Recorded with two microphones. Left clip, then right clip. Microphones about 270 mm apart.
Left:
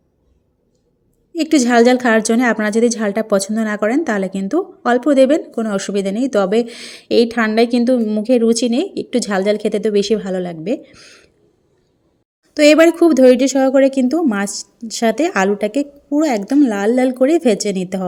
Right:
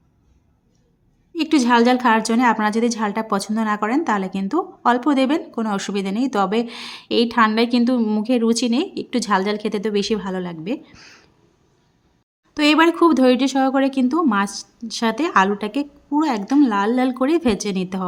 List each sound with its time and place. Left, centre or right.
1.3 s a woman's voice: centre
12.5 s a woman's voice: centre